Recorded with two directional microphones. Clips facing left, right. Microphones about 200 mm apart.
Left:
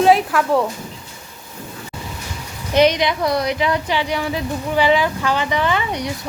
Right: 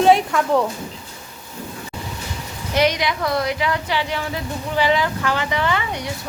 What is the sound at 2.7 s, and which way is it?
A woman's voice, 20° left (ahead or behind).